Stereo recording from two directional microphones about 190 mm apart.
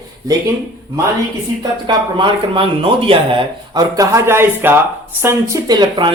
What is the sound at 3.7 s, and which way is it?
A man's voice, 20° right (ahead or behind).